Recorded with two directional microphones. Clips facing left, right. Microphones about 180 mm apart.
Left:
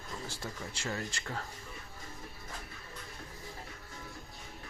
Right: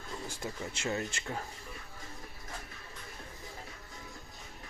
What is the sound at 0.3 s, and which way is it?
Speech, 20° right (ahead or behind).